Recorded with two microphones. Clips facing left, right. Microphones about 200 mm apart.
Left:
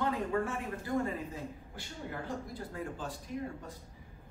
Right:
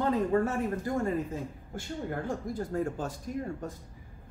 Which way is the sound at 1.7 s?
45° right (ahead or behind).